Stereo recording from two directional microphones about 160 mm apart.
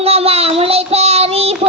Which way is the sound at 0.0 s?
40° right (ahead or behind).